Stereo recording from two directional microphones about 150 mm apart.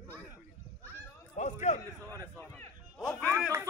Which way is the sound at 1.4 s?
50° left (ahead or behind).